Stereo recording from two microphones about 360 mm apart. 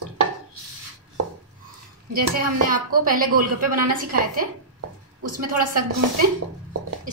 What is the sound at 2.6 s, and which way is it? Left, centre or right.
Speech, right.